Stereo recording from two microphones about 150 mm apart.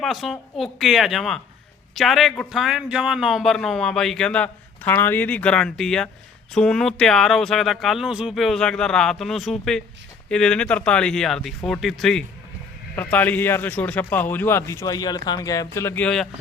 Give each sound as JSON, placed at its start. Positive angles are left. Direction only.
{"t": 0.0, "sound": "a man's voice", "side_deg": 0}